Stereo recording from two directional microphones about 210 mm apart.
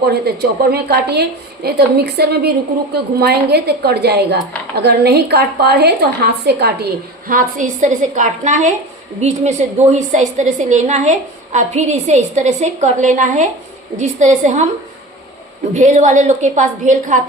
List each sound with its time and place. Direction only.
0.1 s a woman's voice: 50° right (ahead or behind)
15.7 s a woman's voice: 35° right (ahead or behind)